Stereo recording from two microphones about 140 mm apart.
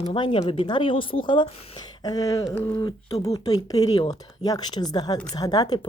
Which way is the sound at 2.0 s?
25° left (ahead or behind).